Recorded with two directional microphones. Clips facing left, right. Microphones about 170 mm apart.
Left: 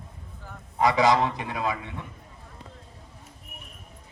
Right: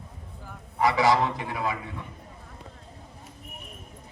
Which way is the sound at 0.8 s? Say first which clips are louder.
Left 1 dB; 20° left (ahead or behind).